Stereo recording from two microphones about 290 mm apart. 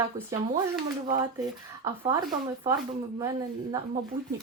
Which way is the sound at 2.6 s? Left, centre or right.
Centre.